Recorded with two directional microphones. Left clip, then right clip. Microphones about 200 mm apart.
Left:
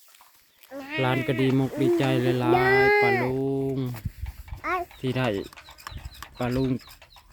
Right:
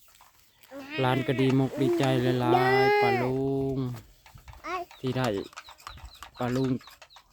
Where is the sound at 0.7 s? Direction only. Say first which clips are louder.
Left 3 dB; 35° left (ahead or behind).